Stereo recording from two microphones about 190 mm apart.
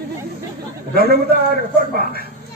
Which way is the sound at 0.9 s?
55° right (ahead or behind).